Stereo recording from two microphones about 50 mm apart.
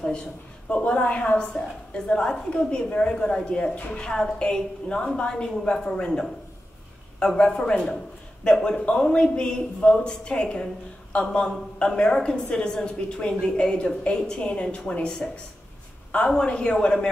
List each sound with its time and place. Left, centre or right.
0.8 s a woman's voice: left
16.3 s a woman's voice: left